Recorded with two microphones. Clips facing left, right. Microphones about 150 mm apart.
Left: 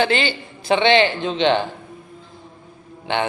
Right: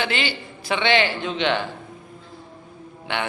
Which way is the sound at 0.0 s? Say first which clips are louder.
Left 6 dB; 30° left (ahead or behind).